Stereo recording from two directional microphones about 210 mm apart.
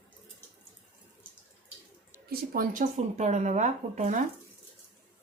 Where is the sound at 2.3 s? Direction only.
40° right (ahead or behind).